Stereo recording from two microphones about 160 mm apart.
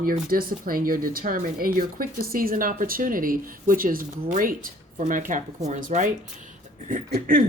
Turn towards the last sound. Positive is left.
turn(degrees=-60)  # may be behind; listen again after turning